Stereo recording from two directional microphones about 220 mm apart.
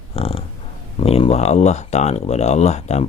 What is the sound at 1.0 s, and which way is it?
Speech, 25° left (ahead or behind).